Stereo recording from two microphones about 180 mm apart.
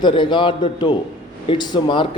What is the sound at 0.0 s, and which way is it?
A man's voice, 25° left (ahead or behind).